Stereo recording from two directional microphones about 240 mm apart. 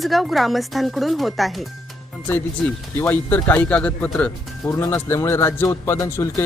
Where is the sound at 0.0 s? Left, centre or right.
Centre.